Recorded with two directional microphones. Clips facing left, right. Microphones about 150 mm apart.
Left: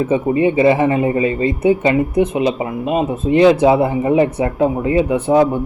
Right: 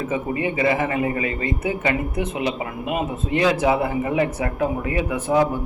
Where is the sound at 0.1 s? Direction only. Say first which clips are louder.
Left 9 dB; 25° left (ahead or behind).